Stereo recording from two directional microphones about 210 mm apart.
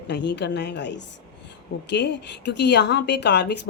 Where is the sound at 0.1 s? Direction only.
55° left (ahead or behind).